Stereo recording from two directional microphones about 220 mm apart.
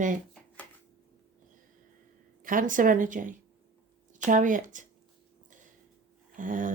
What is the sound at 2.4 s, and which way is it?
Speech, 40° right (ahead or behind).